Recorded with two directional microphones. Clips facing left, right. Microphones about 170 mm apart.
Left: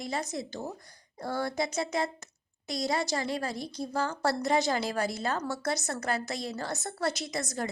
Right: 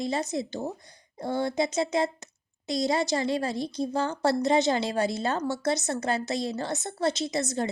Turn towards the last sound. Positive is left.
turn(degrees=-25)  # may be behind; listen again after turning